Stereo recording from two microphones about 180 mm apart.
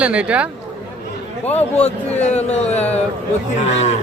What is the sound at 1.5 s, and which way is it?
Speech, 35° left (ahead or behind).